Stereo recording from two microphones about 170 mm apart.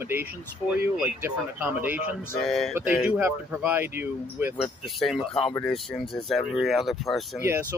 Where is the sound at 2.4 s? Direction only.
Centre (ahead or behind).